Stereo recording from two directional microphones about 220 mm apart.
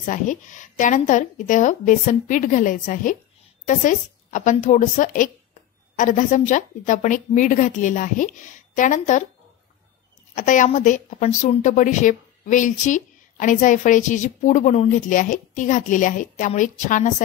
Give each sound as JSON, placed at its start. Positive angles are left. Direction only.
{"t": 0.0, "sound": "a woman's voice", "side_deg": 35}
{"t": 10.3, "sound": "a woman's voice", "side_deg": 35}